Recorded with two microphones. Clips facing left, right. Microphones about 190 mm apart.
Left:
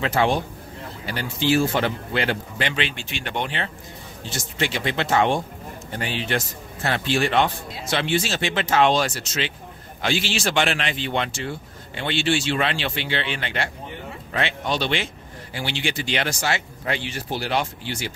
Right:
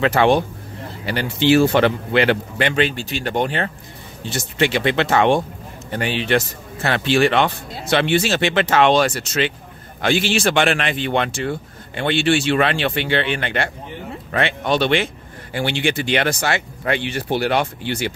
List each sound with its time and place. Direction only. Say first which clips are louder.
0.0 s speech: right 6 dB; 70° right (ahead or behind)
2.7 s speech: right 8 dB; 45° right (ahead or behind)
4.3 s speech: right 7 dB; 65° right (ahead or behind)